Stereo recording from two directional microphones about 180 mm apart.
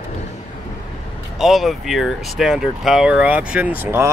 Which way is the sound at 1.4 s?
Centre (ahead or behind).